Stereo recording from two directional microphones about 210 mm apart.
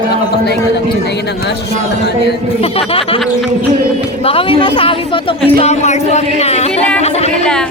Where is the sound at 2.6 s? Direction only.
30° left (ahead or behind).